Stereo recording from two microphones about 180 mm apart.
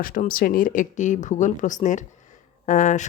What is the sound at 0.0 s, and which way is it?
Speech, 50° left (ahead or behind).